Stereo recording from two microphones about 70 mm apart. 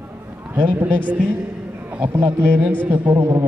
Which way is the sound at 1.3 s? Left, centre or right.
Right.